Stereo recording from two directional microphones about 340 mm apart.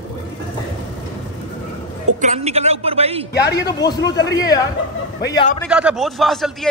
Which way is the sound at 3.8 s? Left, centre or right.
Centre.